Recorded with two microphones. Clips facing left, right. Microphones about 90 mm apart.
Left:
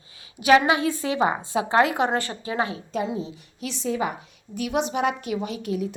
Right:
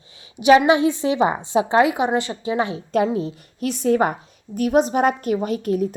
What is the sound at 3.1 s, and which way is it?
A woman's voice, 55° right (ahead or behind).